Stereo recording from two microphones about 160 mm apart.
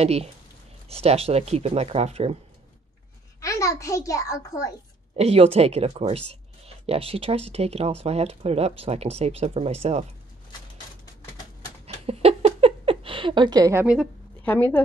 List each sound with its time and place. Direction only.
0.0 s speech: 40° right (ahead or behind)
3.3 s a child's voice: 20° left (ahead or behind)
5.1 s speech: 40° right (ahead or behind)
11.8 s a sound: 40° right (ahead or behind); by 13.8 s 20° right (ahead or behind)
14.4 s a woman's voice: 10° left (ahead or behind)